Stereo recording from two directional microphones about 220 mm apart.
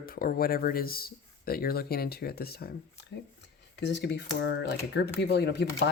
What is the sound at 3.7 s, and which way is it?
Speech, 50° left (ahead or behind).